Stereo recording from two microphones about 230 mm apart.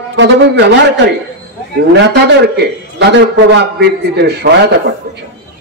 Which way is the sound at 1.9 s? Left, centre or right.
Right.